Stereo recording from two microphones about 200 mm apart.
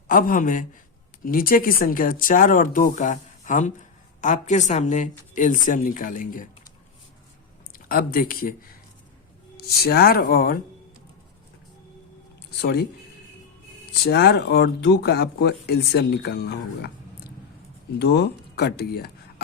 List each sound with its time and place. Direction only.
0.1 s speech: 45° left (ahead or behind)
7.7 s speech: 45° left (ahead or behind)
9.6 s speech: 50° left (ahead or behind)
14.0 s speech: 50° left (ahead or behind)
18.0 s speech: 55° left (ahead or behind)